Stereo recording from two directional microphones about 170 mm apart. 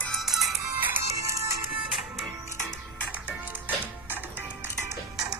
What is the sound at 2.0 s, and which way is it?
Music, centre (ahead or behind).